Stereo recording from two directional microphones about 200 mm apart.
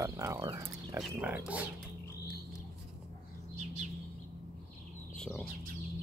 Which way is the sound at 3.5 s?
35° right (ahead or behind).